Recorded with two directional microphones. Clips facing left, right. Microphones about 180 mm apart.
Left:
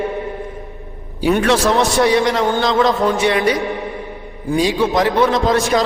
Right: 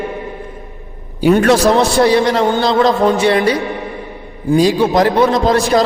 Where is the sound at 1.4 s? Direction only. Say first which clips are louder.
Right 2 dB; 40° right (ahead or behind).